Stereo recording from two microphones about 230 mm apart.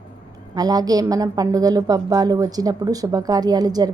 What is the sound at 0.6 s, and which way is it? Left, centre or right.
A woman's voice, centre.